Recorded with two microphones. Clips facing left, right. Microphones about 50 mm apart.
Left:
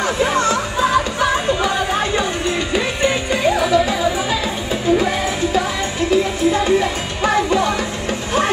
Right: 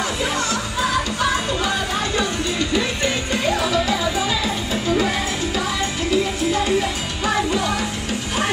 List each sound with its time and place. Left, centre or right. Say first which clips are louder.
0.2 s music: left 6 dB; left